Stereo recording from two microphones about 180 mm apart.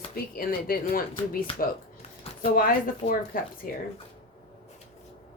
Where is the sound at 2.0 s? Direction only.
35° left (ahead or behind).